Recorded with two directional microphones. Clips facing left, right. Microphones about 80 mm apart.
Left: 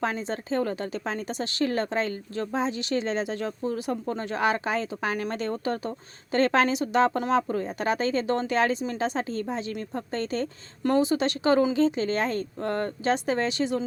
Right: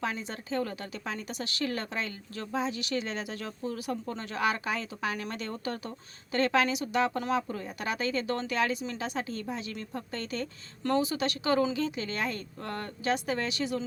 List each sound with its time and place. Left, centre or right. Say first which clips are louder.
0.0 s speech: left 6 dB; left